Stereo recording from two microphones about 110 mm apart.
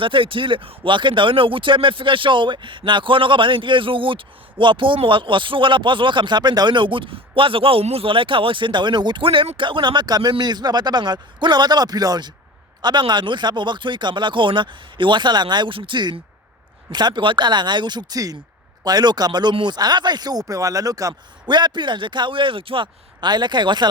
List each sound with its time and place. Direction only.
0.0 s speech: 50° right (ahead or behind)